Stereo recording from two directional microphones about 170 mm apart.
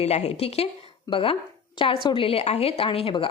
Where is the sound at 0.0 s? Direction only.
40° left (ahead or behind).